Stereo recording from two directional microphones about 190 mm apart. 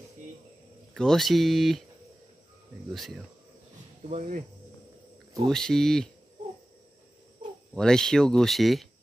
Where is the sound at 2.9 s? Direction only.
Centre (ahead or behind).